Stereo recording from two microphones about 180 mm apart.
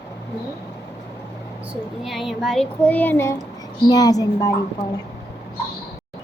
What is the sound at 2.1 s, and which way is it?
A child's voice, centre (ahead or behind).